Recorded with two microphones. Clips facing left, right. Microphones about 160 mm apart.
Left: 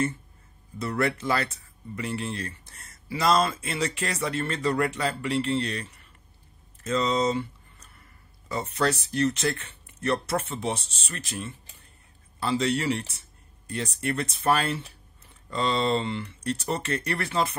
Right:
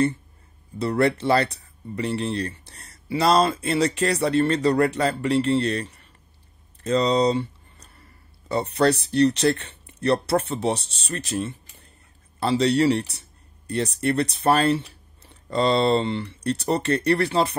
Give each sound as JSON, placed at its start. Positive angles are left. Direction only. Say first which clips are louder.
{"t": 0.7, "sound": "speech", "louder": "right 6 dB", "side_deg": -30}